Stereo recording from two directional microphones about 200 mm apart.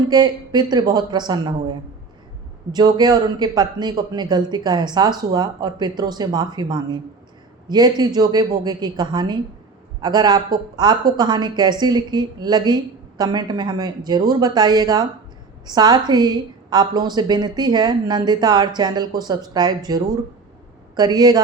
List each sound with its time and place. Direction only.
0.1 s a woman's voice: 20° right (ahead or behind)
2.7 s a woman's voice: 20° right (ahead or behind)